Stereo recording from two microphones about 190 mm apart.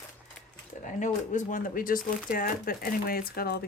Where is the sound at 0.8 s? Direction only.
40° left (ahead or behind).